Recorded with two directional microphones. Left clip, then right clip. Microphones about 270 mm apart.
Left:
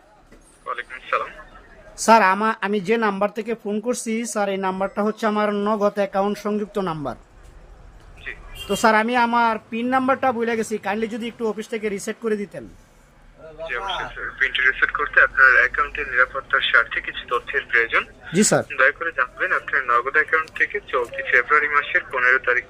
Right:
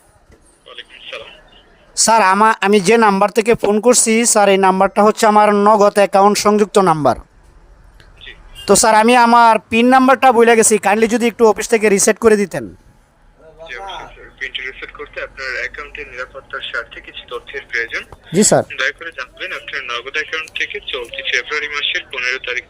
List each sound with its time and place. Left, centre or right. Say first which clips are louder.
2.0 s speech: right 4 dB; right
8.6 s speech: right 8 dB; right
13.7 s radio: left 2 dB; centre
14.3 s speech: left 6 dB; centre
18.3 s speech: right 6 dB; right
18.7 s a man's voice: left 2 dB; centre